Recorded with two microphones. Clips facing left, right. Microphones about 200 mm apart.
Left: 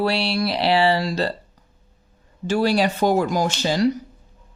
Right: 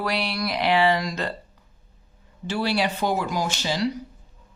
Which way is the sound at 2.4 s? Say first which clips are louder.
Left 5 dB; 45° left (ahead or behind).